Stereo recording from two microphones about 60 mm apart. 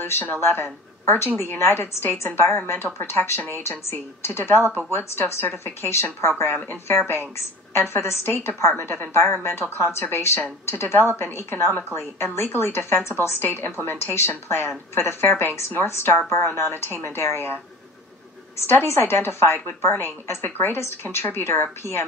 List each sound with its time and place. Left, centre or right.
0.0 s a woman's voice: left
5.6 s a woman's voice: left
18.7 s a woman's voice: left